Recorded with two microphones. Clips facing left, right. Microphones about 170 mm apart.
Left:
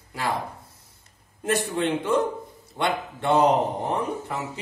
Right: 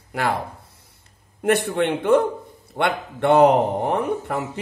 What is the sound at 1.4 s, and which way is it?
Speech, 60° right (ahead or behind).